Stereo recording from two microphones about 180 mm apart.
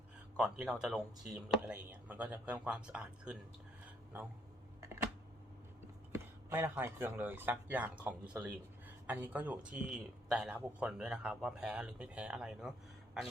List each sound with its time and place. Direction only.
0.3 s a man's voice: 5° right (ahead or behind)
6.1 s a man's voice: 15° right (ahead or behind)